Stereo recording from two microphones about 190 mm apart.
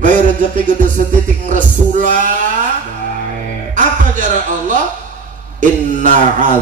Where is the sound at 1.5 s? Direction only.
45° right (ahead or behind).